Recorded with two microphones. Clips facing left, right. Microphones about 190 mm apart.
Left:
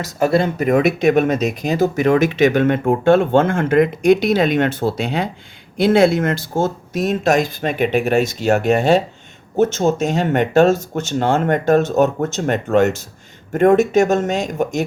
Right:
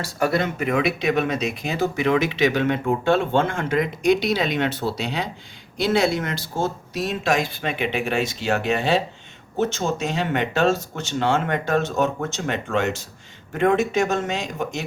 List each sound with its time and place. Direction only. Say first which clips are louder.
0.0 s speech: left 6 dB; 25° left (ahead or behind); by 14.8 s 45° left (ahead or behind)